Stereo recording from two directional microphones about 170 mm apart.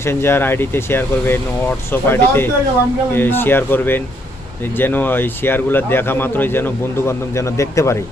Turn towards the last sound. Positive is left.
turn(degrees=15)  # may be behind; listen again after turning